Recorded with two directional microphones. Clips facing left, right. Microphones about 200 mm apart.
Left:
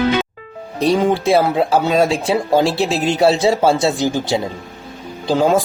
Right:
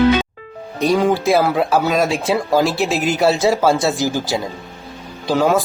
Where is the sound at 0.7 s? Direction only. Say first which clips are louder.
Even; 30° left (ahead or behind).